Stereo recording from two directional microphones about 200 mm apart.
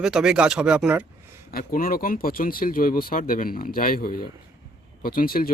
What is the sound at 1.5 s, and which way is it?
Speech, 45° left (ahead or behind).